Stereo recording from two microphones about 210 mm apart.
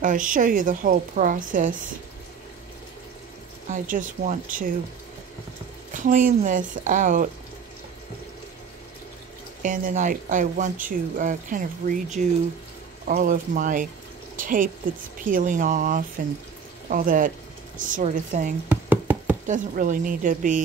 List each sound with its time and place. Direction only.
0.0 s speech: 40° right (ahead or behind)
3.6 s speech: 40° right (ahead or behind)
5.9 s speech: 40° right (ahead or behind)
9.6 s speech: 40° right (ahead or behind)
14.3 s a sound: 40° right (ahead or behind)
15.2 s speech: 40° right (ahead or behind)
18.7 s knock: 10° right (ahead or behind)
19.4 s speech: 40° right (ahead or behind)